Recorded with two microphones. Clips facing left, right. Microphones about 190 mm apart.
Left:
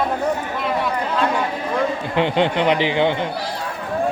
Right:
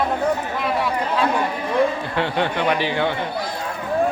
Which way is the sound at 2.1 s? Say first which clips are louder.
Left 4 dB; 20° left (ahead or behind).